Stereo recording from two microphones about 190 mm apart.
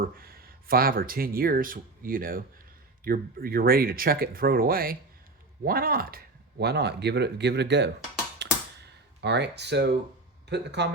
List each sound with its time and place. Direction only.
0.0 s speech: 50° right (ahead or behind)
8.4 s a sound: 65° right (ahead or behind)
10.5 s speech: 65° right (ahead or behind)